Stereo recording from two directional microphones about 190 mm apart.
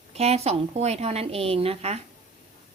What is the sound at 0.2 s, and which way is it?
A woman's voice, 35° right (ahead or behind).